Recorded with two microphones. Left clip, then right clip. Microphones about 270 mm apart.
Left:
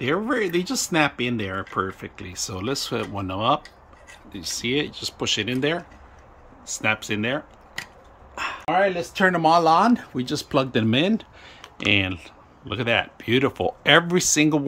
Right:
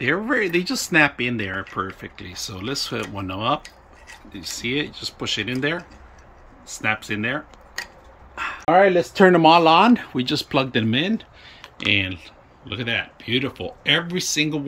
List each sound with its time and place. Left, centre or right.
0.0 s speech: centre
8.6 s speech: centre